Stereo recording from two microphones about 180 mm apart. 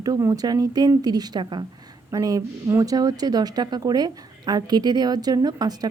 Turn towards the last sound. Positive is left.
turn(degrees=-20)  # may be behind; listen again after turning